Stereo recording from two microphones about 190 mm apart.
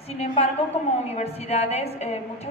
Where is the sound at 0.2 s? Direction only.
35° left (ahead or behind).